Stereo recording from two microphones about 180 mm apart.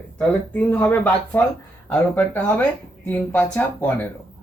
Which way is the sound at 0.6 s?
10° left (ahead or behind).